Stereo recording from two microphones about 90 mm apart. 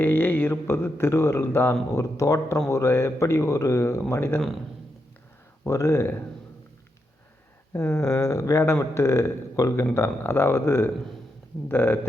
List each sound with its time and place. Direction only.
0.0 s speech: 20° left (ahead or behind)
5.6 s speech: 35° left (ahead or behind)
7.7 s speech: 25° left (ahead or behind)